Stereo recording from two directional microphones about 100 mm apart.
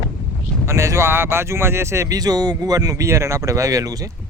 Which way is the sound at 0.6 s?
30° right (ahead or behind).